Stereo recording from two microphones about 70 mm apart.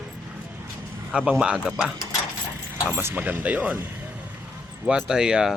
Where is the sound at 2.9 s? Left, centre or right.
Right.